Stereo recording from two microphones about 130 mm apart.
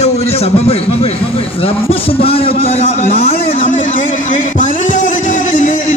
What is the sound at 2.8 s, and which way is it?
Speech, 50° left (ahead or behind).